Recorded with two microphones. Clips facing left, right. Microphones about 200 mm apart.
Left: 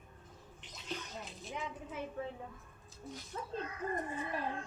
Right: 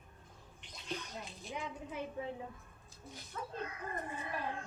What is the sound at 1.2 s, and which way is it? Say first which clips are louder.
Speech: even; centre (ahead or behind).